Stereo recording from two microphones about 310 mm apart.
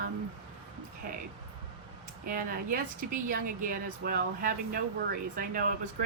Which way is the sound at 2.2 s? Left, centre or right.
Right.